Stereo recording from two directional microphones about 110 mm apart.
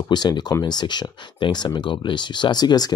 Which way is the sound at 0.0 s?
40° left (ahead or behind).